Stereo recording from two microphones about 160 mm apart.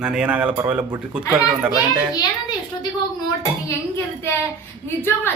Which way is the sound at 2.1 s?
25° left (ahead or behind).